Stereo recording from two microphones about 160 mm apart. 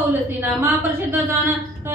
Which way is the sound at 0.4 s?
10° right (ahead or behind).